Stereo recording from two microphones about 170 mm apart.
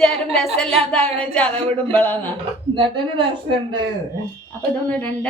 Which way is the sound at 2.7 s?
30° right (ahead or behind).